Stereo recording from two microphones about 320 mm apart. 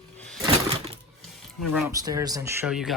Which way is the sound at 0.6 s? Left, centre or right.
Centre.